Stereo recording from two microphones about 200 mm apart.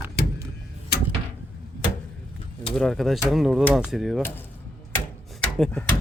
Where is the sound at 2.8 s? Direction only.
Centre (ahead or behind).